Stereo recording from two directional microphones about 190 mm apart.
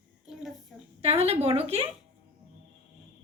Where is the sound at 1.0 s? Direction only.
30° right (ahead or behind).